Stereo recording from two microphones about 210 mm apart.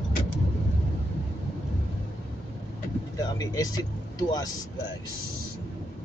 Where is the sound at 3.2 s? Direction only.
15° left (ahead or behind).